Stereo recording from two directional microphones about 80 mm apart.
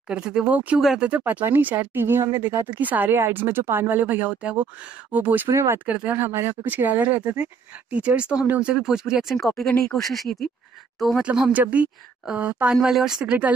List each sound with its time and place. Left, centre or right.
0.1 s speech: centre
0.7 s speech: centre
1.0 s speech: centre
5.5 s speech: right
5.9 s speech: centre
9.6 s speech: centre
11.2 s speech: centre
12.7 s speech: centre